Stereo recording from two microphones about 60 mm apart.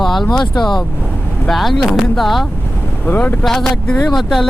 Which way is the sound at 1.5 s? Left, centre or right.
Centre.